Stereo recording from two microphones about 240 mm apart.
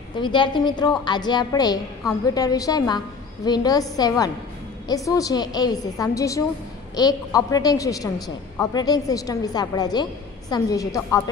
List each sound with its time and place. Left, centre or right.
0.2 s a woman's voice: centre